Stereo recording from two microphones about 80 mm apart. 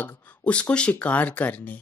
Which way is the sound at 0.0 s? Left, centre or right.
Centre.